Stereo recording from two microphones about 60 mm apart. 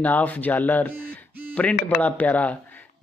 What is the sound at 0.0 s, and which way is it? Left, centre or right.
A man's voice, left.